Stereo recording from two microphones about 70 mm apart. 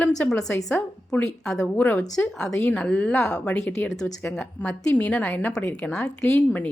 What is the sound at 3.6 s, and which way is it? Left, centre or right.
Speech, left.